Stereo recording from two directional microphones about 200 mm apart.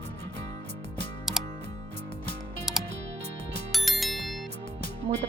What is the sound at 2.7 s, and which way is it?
Music, centre (ahead or behind).